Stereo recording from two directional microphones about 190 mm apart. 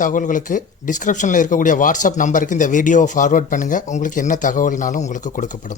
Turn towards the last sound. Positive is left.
turn(degrees=40)  # may be behind; listen again after turning